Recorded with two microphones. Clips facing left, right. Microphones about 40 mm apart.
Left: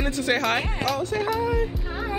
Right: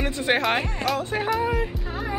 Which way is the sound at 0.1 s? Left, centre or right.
Right.